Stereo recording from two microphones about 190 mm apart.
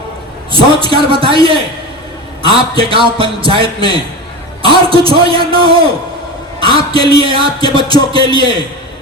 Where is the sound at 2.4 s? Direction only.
30° right (ahead or behind).